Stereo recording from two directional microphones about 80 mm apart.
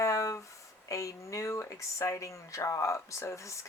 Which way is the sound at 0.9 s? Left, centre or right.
Left.